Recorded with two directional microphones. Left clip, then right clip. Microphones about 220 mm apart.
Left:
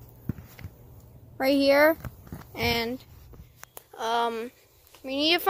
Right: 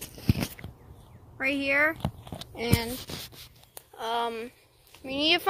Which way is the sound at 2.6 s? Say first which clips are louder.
Left 3 dB; 20° left (ahead or behind).